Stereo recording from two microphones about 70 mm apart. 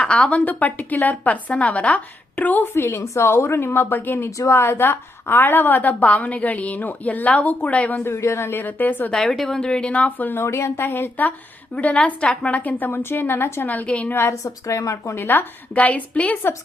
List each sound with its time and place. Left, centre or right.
0.0 s a woman's voice: centre
2.7 s a woman's voice: left
4.3 s speech: left
4.5 s a woman's voice: left; by 8.0 s centre
8.0 s a woman's voice: left
8.6 s a woman's voice: left
9.1 s a woman's voice: centre; by 10.4 s left
10.4 s a woman's voice: left; by 14.1 s centre
14.1 s a woman's voice: left
14.4 s speech: left
15.1 s a woman's voice: left